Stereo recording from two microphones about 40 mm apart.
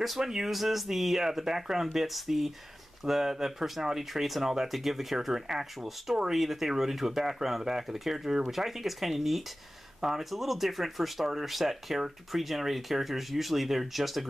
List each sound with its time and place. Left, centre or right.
0.0 s speech: centre